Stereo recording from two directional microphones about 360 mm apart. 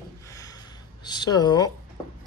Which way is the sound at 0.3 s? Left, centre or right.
Centre.